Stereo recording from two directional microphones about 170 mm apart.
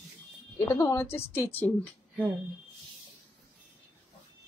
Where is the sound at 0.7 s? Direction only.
15° left (ahead or behind).